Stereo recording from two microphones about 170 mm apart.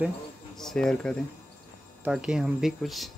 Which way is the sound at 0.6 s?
5° left (ahead or behind).